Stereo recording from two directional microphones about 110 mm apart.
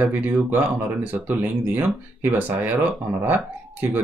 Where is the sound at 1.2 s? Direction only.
15° right (ahead or behind).